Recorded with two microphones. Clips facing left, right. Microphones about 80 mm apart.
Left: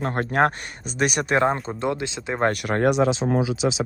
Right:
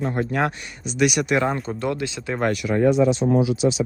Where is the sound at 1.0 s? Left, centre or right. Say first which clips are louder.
Right 1 dB; left.